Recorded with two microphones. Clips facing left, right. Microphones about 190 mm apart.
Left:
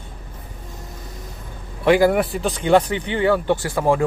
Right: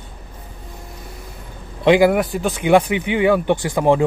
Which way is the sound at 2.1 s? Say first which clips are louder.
Right 1 dB; centre (ahead or behind).